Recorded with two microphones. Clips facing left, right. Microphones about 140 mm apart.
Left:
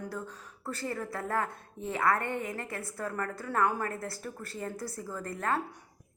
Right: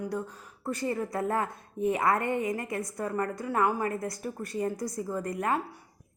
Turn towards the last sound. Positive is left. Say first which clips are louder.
# right 3 dB
turn(degrees=-15)  # may be behind; listen again after turning